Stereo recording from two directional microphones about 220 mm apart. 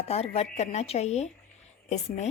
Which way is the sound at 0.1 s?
30° left (ahead or behind).